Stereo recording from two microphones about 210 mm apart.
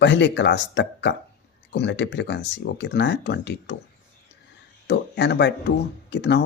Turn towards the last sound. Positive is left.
turn(degrees=55)  # may be behind; listen again after turning